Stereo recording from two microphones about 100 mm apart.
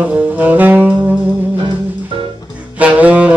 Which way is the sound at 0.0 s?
15° right (ahead or behind).